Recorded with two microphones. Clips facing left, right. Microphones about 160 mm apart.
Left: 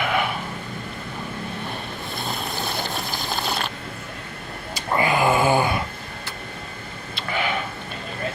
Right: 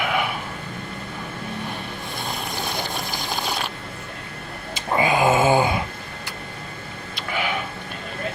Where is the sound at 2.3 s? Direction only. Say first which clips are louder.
Even; 15° right (ahead or behind).